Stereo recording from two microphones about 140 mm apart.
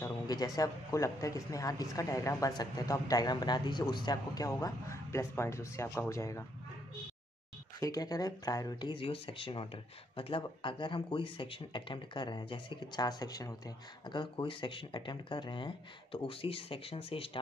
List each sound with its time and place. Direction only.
0.0 s a sound: 25° left (ahead or behind)
0.6 s speech: 20° left (ahead or behind)
7.8 s speech: 25° left (ahead or behind)
8.9 s speech: 40° left (ahead or behind)